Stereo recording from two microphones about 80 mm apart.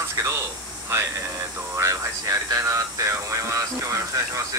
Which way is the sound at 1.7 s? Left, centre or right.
Right.